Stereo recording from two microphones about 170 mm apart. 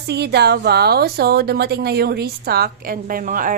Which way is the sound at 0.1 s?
75° right (ahead or behind).